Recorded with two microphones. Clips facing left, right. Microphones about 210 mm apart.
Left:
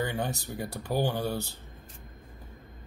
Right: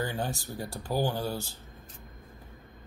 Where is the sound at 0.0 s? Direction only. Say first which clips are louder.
Left 1 dB; 20° left (ahead or behind).